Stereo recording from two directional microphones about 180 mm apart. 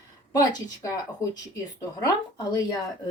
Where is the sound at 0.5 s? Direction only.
20° left (ahead or behind).